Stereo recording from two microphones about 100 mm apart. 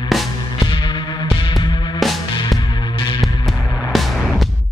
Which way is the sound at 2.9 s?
60° left (ahead or behind).